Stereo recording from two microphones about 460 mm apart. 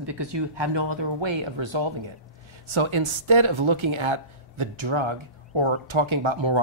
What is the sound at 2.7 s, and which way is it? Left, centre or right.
Speech, right.